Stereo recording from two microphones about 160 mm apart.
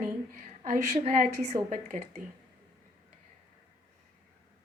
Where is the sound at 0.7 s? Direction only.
50° right (ahead or behind).